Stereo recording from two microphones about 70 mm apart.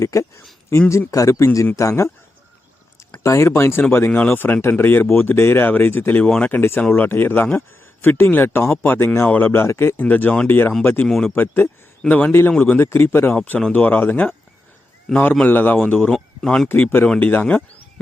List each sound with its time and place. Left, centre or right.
0.0 s speech: left
3.2 s speech: left
6.2 s speech: centre
6.5 s speech: left
10.1 s speech: left
11.0 s speech: centre
11.3 s speech: left
12.9 s speech: left
16.4 s speech: centre
16.6 s speech: left